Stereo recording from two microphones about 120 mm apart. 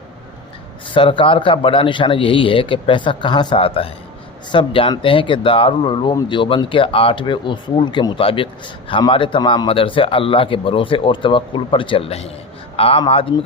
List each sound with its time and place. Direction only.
0.9 s speech: 45° left (ahead or behind)